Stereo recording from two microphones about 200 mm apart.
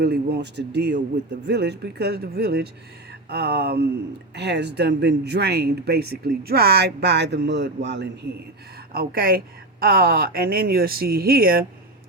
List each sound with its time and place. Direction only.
0.0 s speech: 55° right (ahead or behind)